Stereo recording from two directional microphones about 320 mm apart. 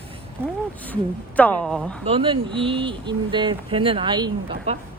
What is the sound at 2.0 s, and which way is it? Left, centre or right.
Speech, centre.